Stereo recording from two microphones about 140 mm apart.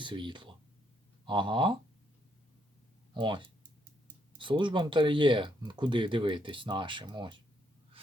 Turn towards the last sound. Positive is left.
turn(degrees=-35)  # may be behind; listen again after turning